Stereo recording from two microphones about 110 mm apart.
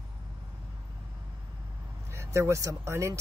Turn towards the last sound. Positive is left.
turn(degrees=-25)  # may be behind; listen again after turning